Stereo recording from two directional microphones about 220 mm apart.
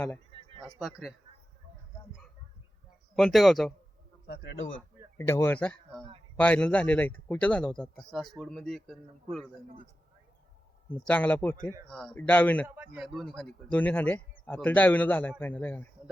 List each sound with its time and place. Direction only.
0.3 s a sound: 25° right (ahead or behind)
0.8 s a man's voice: centre (ahead or behind)
3.2 s a man's voice: centre (ahead or behind)
4.3 s speech: 55° left (ahead or behind)
5.1 s a man's voice: 10° left (ahead or behind)
11.0 s speech: 5° left (ahead or behind)
12.6 s speech: 10° right (ahead or behind); by 15.9 s 10° left (ahead or behind)